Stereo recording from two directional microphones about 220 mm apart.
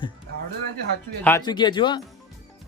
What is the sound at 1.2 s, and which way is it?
Speech, 15° left (ahead or behind).